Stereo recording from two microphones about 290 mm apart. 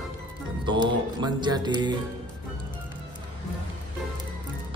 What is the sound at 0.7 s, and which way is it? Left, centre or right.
A man's voice, centre.